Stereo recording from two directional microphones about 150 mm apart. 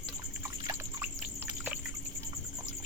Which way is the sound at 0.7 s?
15° right (ahead or behind).